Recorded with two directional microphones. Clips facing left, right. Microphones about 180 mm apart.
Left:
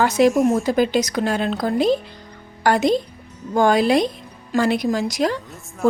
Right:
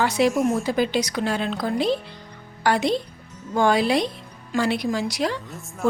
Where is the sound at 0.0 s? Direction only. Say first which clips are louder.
Left 4 dB; 45° left (ahead or behind).